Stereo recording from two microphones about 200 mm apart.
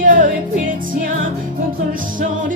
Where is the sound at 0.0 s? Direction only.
40° right (ahead or behind).